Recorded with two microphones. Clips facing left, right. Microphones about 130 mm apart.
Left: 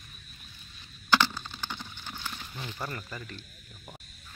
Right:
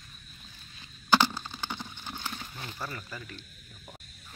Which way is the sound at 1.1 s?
10° right (ahead or behind).